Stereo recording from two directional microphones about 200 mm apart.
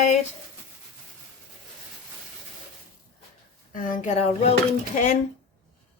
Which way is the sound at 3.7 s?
45° left (ahead or behind).